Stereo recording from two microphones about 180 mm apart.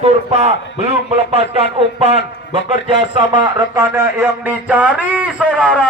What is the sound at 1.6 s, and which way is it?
Speech, 35° right (ahead or behind).